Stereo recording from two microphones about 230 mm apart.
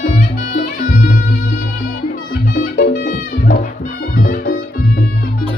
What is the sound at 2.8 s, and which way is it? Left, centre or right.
Music, left.